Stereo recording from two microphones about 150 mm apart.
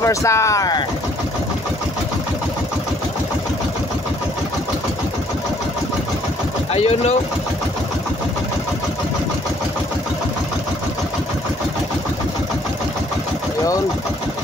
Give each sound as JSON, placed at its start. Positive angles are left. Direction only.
{"t": 0.0, "sound": "speech", "side_deg": 20}
{"t": 6.7, "sound": "speech", "side_deg": 45}